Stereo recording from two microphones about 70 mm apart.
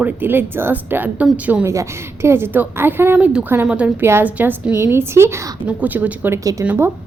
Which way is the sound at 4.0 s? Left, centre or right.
Right.